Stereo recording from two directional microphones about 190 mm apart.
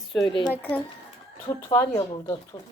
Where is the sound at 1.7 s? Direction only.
20° left (ahead or behind).